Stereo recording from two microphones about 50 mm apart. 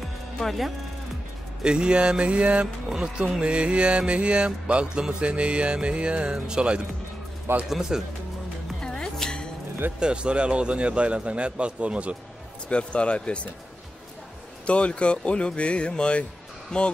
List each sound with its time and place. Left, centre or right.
0.4 s speech: centre
1.6 s a man's voice: centre
7.5 s speech: right
7.9 s speech: centre
8.8 s music: centre
9.9 s a man's voice: centre
12.6 s speech: left
14.7 s speech: left